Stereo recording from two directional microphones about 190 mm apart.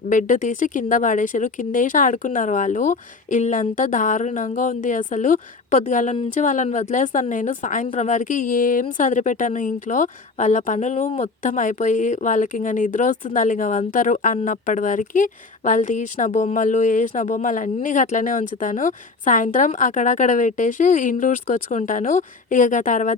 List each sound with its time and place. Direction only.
0.1 s a woman's voice: 45° left (ahead or behind)